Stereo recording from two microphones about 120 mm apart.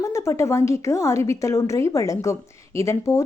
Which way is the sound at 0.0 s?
25° left (ahead or behind).